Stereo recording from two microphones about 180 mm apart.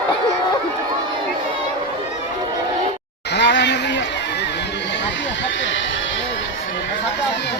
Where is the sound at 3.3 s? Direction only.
70° left (ahead or behind).